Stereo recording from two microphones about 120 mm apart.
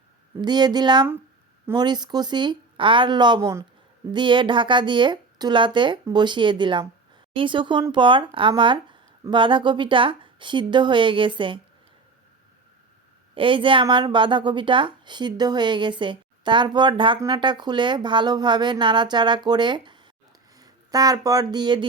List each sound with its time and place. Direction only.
0.4 s a woman's voice: 35° right (ahead or behind)
13.3 s a woman's voice: 45° right (ahead or behind)